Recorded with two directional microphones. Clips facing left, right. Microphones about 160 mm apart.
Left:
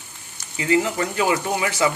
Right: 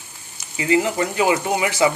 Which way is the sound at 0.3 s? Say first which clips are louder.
Right 1 dB; 20° right (ahead or behind).